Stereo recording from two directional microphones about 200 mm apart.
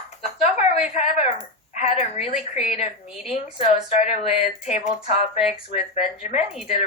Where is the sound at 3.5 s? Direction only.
35° left (ahead or behind).